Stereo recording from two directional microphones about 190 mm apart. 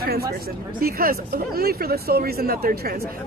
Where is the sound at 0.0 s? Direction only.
55° right (ahead or behind).